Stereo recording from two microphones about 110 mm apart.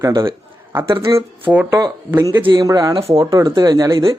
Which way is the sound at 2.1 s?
30° right (ahead or behind).